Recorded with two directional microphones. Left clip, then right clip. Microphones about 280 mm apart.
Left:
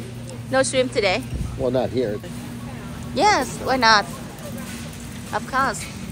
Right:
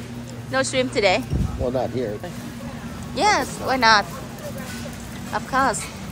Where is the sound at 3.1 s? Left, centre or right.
Centre.